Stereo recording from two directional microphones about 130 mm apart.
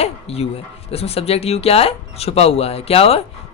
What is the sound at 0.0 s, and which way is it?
A man's voice, 50° left (ahead or behind).